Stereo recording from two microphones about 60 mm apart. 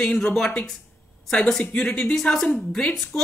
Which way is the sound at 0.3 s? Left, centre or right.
Centre.